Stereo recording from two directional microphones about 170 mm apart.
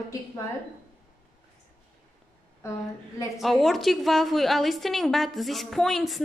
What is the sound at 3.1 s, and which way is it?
Speech, 20° left (ahead or behind).